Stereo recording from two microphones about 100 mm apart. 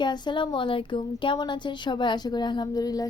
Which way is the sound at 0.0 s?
50° left (ahead or behind).